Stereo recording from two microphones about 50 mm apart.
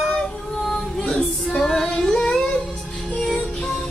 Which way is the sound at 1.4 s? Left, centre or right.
Centre.